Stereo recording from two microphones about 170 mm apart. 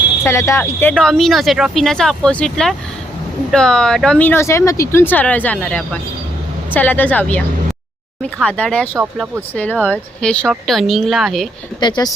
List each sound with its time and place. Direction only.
0.3 s speech: 15° left (ahead or behind)
9.1 s speech: 10° right (ahead or behind)
9.6 s speech: 10° left (ahead or behind)
11.8 s speech: 25° left (ahead or behind)